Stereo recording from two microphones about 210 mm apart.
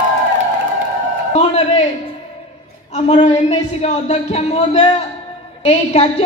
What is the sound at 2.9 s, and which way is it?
A woman's voice, 30° left (ahead or behind).